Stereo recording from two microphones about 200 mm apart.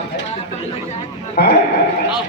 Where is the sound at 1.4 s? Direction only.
50° left (ahead or behind).